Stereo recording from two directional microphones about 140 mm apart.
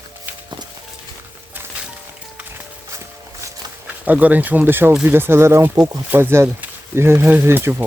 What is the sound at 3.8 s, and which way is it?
Speech, 10° right (ahead or behind).